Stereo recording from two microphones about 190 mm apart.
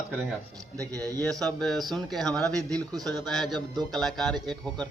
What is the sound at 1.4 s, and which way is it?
A man's voice, centre (ahead or behind).